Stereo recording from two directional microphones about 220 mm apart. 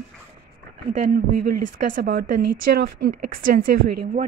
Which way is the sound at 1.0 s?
35° right (ahead or behind).